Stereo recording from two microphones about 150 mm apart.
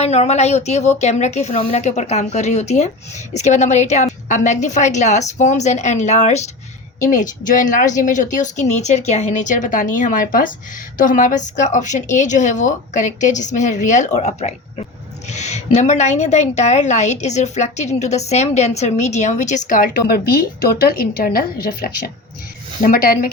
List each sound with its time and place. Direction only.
0.0 s a woman's voice: 45° left (ahead or behind); by 22.1 s 90° left
22.8 s speech: 75° left (ahead or behind)